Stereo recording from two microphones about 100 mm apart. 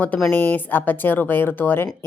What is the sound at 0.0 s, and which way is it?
Speech, 15° left (ahead or behind).